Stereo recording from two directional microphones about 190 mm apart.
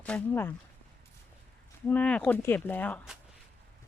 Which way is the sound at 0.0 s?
5° left (ahead or behind).